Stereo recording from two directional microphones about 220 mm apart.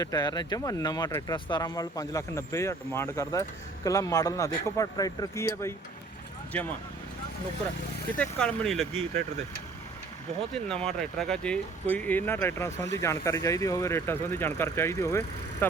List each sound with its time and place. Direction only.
0.0 s speech: 20° left (ahead or behind)
8.2 s speech: 5° left (ahead or behind)
10.5 s speech: 5° left (ahead or behind)